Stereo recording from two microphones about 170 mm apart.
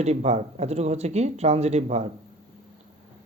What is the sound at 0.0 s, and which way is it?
Speech, 40° right (ahead or behind).